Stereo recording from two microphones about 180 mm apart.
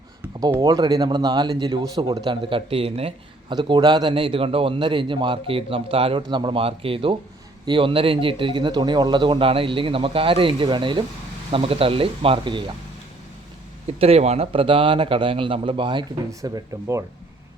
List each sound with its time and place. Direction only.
0.3 s speech: 20° right (ahead or behind)
13.8 s speech: 35° right (ahead or behind); by 17.0 s 15° right (ahead or behind)